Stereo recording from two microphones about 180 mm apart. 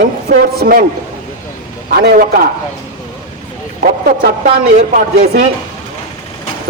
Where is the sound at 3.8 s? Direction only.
55° right (ahead or behind).